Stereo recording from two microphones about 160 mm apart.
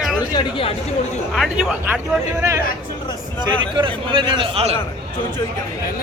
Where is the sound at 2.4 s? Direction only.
20° right (ahead or behind).